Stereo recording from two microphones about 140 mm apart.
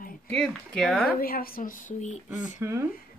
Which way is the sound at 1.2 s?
90° left.